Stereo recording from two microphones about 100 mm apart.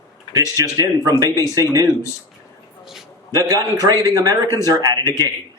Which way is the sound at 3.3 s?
35° right (ahead or behind).